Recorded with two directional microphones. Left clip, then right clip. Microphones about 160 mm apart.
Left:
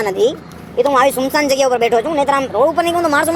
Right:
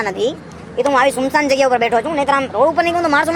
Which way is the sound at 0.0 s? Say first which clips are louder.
Left 3 dB; 40° left (ahead or behind).